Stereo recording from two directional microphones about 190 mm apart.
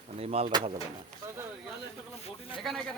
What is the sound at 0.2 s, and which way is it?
Speech, 35° right (ahead or behind).